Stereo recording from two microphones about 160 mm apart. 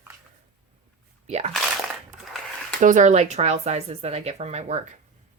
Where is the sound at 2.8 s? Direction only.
50° right (ahead or behind).